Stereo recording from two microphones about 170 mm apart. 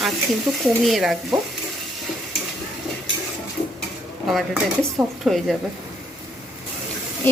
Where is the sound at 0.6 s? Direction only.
Centre (ahead or behind).